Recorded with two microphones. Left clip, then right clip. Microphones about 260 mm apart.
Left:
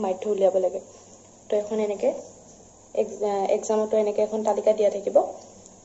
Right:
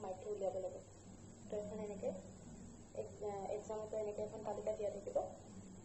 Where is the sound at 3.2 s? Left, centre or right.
Left.